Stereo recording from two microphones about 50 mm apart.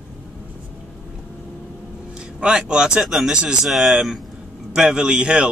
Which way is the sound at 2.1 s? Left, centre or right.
Centre.